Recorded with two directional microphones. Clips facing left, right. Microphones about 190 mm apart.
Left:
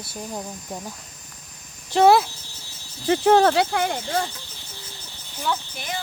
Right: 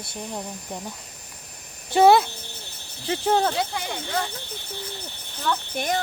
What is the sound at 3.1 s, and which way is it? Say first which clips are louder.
Speech: left 6 dB; 65° left (ahead or behind).